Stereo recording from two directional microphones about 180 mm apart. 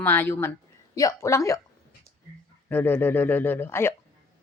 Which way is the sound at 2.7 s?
10° left (ahead or behind).